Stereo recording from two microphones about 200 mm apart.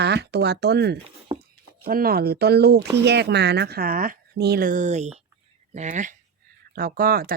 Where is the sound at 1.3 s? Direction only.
25° right (ahead or behind).